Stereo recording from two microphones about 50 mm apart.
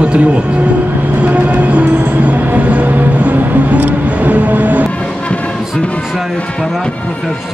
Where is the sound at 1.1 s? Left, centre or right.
Right.